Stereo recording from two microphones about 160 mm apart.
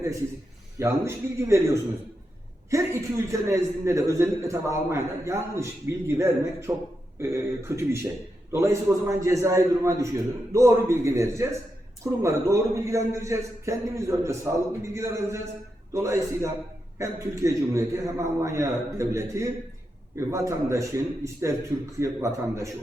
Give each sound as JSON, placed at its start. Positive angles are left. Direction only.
{"t": 0.8, "sound": "a man's voice", "side_deg": -15}